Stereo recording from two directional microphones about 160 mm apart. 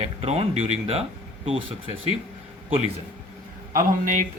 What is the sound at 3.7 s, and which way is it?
Speech, 55° right (ahead or behind).